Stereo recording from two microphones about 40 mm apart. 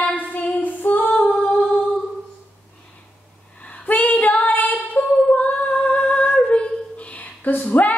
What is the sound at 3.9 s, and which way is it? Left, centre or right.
Female singing, left.